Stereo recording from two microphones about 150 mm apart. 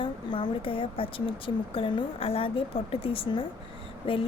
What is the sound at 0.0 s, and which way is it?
A woman's voice, 30° left (ahead or behind).